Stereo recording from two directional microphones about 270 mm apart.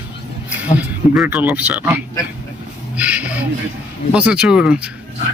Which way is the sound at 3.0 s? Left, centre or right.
Centre.